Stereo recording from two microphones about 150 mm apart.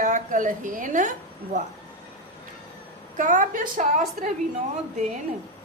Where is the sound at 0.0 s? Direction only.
60° right (ahead or behind).